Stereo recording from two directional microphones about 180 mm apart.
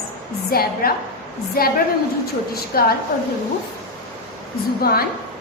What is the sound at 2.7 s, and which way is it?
Speech, 55° left (ahead or behind).